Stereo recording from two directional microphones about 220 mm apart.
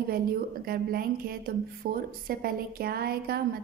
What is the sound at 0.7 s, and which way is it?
A woman's voice, 40° right (ahead or behind).